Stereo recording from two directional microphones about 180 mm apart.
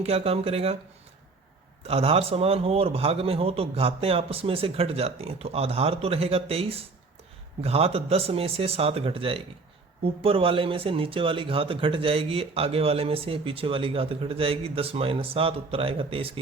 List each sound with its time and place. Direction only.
0.0 s speech: 35° right (ahead or behind)
1.9 s speech: 35° right (ahead or behind)